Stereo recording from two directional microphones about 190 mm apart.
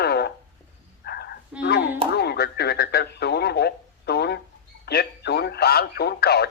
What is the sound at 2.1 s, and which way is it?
Radio, 60° left (ahead or behind).